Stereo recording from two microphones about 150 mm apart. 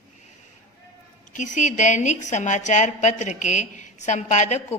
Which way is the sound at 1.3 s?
55° left (ahead or behind).